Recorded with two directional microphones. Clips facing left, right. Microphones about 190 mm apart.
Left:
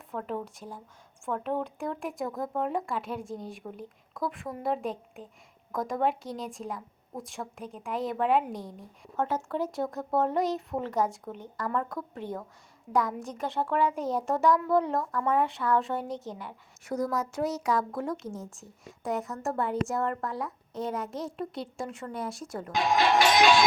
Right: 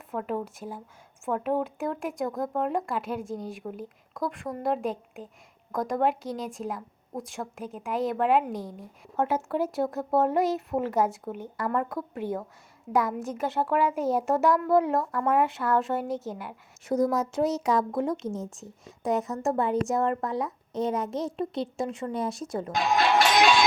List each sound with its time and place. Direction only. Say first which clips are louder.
0.1 s speech: right 3 dB; 5° right (ahead or behind)
16.8 s a woman's voice: right 5 dB; 20° right (ahead or behind)